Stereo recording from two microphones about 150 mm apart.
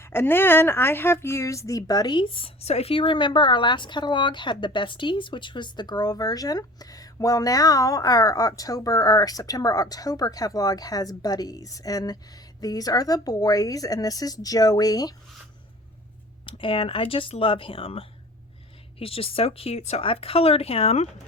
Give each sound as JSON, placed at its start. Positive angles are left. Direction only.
{"t": 0.0, "sound": "speech", "side_deg": 15}
{"t": 16.5, "sound": "speech", "side_deg": 35}